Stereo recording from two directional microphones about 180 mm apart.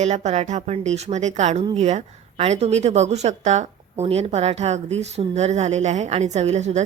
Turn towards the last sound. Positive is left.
turn(degrees=-40)  # may be behind; listen again after turning